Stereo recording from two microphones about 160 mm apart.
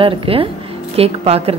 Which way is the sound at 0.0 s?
35° right (ahead or behind).